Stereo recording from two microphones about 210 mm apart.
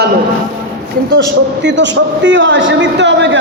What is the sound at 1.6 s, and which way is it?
A man's voice, 60° right (ahead or behind).